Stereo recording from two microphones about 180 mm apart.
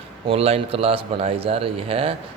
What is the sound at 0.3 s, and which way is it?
A man's voice, 35° right (ahead or behind).